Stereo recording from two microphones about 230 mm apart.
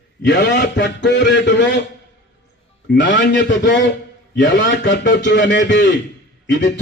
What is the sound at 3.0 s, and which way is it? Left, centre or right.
A man's voice, left.